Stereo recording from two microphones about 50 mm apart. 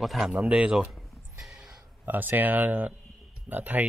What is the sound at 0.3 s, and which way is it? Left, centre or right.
Speech, right.